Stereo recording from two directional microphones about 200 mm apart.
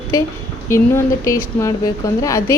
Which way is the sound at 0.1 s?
15° left (ahead or behind).